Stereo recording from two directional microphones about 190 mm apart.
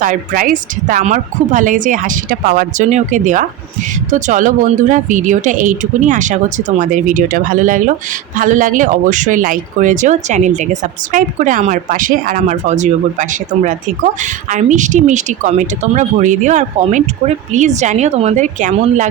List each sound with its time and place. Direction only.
0.0 s speech: 45° right (ahead or behind)